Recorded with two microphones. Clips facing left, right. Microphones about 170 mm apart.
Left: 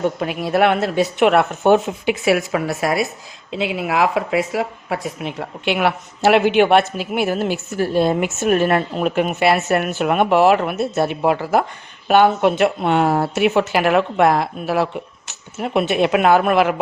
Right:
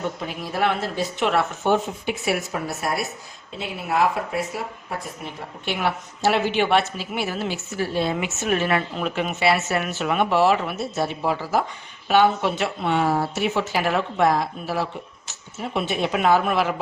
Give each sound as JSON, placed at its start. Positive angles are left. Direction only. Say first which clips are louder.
{"t": 0.2, "sound": "speech", "louder": "left 8 dB", "side_deg": 70}